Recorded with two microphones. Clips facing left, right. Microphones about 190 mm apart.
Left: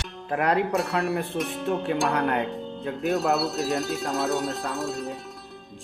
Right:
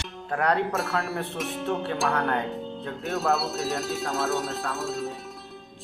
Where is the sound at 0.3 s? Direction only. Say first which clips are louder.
Left 1 dB; 10° left (ahead or behind).